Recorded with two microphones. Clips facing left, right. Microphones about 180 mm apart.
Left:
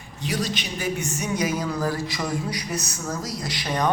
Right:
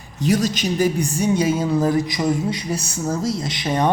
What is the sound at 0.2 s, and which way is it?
A woman's voice, 45° right (ahead or behind).